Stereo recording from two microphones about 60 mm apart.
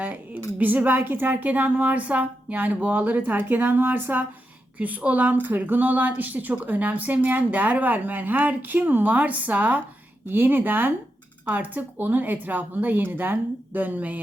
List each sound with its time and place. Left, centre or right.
0.6 s a woman's voice: right
10.2 s speech: right